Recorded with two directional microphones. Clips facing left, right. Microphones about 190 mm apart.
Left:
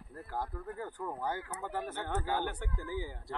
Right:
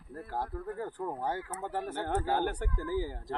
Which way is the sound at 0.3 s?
30° right (ahead or behind).